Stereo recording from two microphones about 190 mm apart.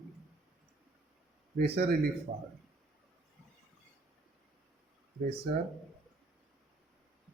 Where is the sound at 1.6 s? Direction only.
55° right (ahead or behind).